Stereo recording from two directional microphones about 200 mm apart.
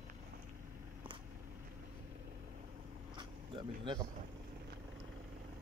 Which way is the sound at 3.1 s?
20° right (ahead or behind).